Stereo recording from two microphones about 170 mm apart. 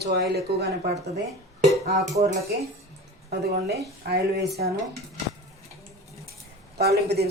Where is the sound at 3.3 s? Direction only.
70° right (ahead or behind).